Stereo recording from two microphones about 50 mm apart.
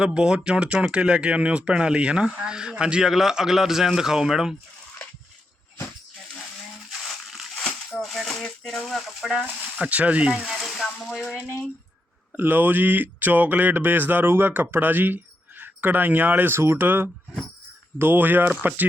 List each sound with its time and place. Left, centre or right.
0.0 s speech: centre
7.5 s a sound: centre
9.8 s speech: right
10.4 s sizzle: centre
11.0 s a sound: centre
12.4 s speech: right